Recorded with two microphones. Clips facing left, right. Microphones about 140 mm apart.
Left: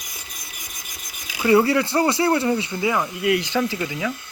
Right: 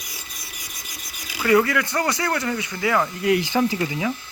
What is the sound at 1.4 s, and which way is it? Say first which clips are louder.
Speech: left 2 dB; 30° left (ahead or behind).